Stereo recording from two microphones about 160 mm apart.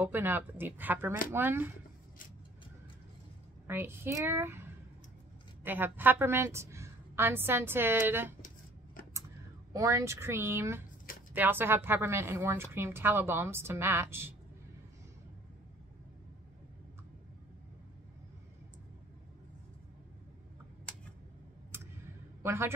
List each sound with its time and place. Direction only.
0.0 s a woman's voice: 10° right (ahead or behind)
3.6 s a woman's voice: 15° right (ahead or behind)
9.7 s a woman's voice: 20° right (ahead or behind)
21.7 s a sound: 15° right (ahead or behind)
22.4 s a man's voice: 15° right (ahead or behind)